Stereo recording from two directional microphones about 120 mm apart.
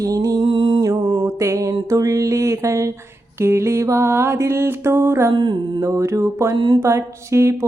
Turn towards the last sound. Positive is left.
turn(degrees=-25)  # may be behind; listen again after turning